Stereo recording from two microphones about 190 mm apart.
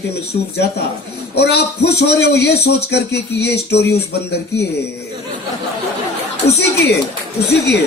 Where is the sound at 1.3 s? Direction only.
60° left (ahead or behind).